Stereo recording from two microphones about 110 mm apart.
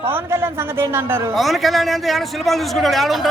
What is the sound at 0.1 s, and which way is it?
A man's voice, 20° right (ahead or behind).